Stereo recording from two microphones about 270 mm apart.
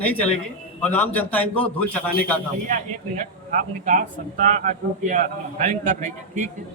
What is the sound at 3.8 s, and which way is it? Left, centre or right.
A man's voice, right.